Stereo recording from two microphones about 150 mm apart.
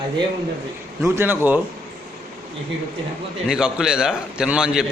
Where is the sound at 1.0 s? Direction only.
15° right (ahead or behind).